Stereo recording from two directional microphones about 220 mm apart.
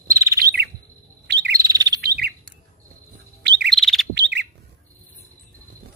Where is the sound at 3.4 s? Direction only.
50° right (ahead or behind).